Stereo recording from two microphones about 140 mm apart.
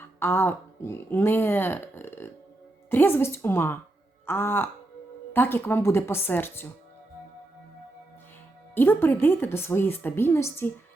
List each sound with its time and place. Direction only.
0.0 s speech: 15° left (ahead or behind)
8.7 s speech: 15° left (ahead or behind)